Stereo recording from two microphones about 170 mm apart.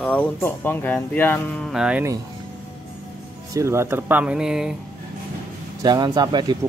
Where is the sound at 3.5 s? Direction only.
15° right (ahead or behind).